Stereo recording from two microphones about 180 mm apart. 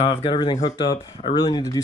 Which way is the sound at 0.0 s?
30° left (ahead or behind).